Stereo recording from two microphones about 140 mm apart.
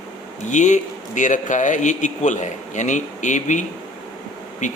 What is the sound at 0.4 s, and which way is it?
Speech, 60° left (ahead or behind).